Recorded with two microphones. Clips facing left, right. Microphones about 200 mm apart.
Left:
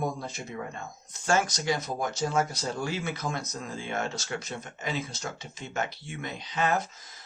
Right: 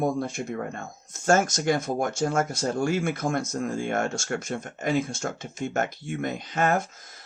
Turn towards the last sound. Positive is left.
turn(degrees=-50)  # may be behind; listen again after turning